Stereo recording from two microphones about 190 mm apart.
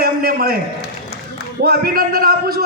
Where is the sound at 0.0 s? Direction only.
55° right (ahead or behind).